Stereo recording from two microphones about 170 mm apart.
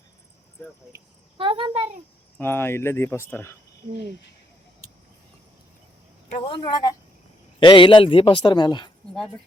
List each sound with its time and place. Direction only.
1.4 s a child's voice: 30° right (ahead or behind)
2.4 s speech: 15° left (ahead or behind)
6.3 s a man's voice: 30° left (ahead or behind)